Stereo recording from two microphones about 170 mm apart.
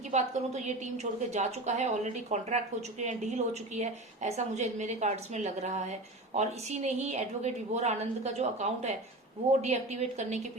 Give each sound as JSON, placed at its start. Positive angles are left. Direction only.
{"t": 0.1, "sound": "a woman's voice", "side_deg": -45}